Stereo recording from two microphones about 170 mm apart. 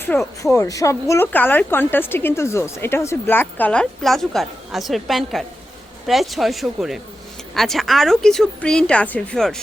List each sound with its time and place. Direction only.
0.0 s a woman's voice: 15° left (ahead or behind)